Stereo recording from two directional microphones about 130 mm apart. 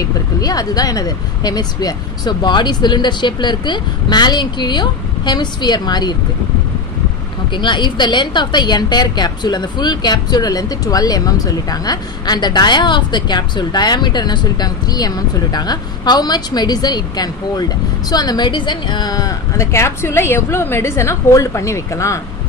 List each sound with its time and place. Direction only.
0.4 s a woman's voice: 30° left (ahead or behind)
7.5 s a woman's voice: 35° left (ahead or behind)